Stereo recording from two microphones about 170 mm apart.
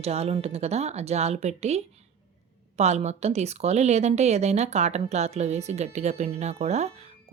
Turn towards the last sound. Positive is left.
turn(degrees=-40)  # may be behind; listen again after turning